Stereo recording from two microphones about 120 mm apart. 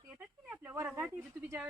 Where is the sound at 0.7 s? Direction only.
20° right (ahead or behind).